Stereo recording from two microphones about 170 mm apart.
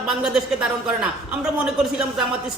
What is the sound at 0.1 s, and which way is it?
Speech, 5° right (ahead or behind).